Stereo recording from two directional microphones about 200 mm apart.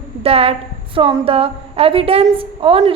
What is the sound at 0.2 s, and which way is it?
A woman's voice, 30° right (ahead or behind).